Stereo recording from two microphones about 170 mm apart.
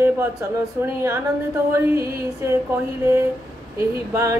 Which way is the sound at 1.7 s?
20° right (ahead or behind).